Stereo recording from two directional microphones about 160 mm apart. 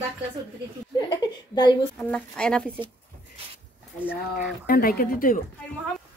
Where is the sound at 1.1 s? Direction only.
25° left (ahead or behind).